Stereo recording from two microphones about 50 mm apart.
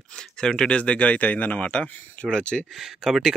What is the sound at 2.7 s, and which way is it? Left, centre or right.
Speech, centre.